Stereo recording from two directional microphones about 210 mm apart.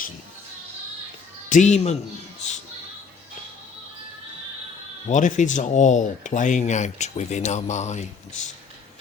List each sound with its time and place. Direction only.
1.5 s speech: 35° left (ahead or behind)
5.0 s speech: 35° left (ahead or behind)